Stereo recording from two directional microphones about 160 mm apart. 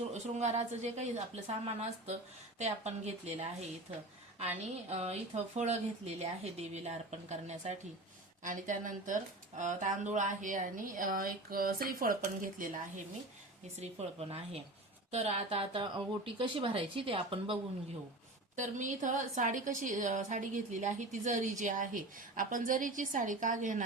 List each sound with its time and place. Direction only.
0.1 s a woman's voice: 45° right (ahead or behind)
4.9 s a woman's voice: 40° right (ahead or behind); by 12.7 s 60° right (ahead or behind)
13.7 s speech: 40° right (ahead or behind)
18.5 s a woman's voice: 50° right (ahead or behind)